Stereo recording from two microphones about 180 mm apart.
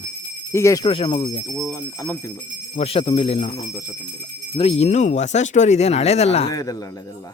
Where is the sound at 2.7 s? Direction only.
35° left (ahead or behind).